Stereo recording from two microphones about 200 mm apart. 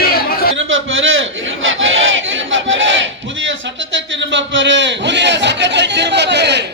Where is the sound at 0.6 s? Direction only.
75° right (ahead or behind).